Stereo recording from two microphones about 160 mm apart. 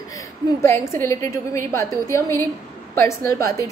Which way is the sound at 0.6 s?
15° left (ahead or behind).